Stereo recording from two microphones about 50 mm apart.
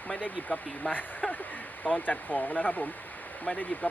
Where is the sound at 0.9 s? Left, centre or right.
Left.